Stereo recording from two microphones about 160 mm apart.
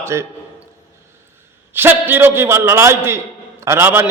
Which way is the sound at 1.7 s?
15° right (ahead or behind).